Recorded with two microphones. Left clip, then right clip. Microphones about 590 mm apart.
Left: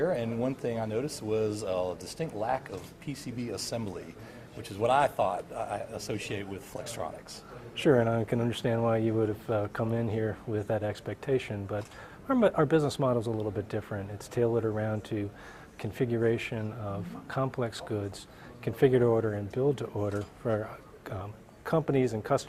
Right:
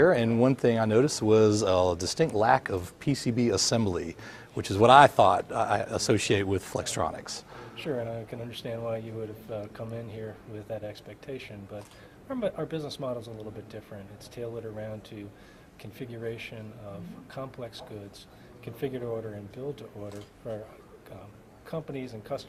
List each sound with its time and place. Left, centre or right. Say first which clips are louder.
0.0 s speech: right 7 dB; right
7.8 s speech: left 8 dB; left